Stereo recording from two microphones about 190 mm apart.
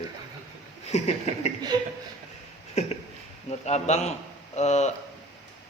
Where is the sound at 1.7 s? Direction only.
20° right (ahead or behind).